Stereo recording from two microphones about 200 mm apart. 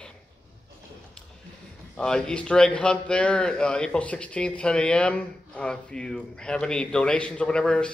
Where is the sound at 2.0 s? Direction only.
5° left (ahead or behind).